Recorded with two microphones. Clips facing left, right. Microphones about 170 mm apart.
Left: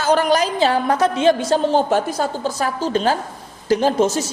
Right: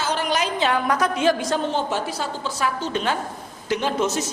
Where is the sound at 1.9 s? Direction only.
45° left (ahead or behind).